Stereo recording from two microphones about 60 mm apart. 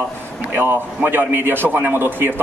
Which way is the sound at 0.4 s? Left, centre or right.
Right.